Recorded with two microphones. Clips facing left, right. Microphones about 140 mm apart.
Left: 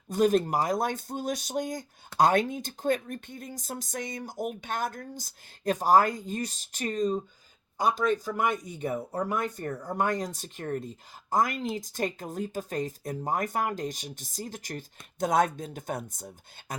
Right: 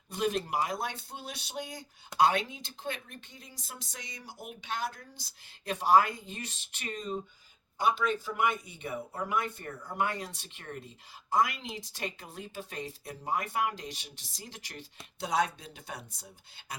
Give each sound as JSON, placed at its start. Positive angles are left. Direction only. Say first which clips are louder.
{"t": 0.1, "sound": "speech", "louder": "left 8 dB", "side_deg": 45}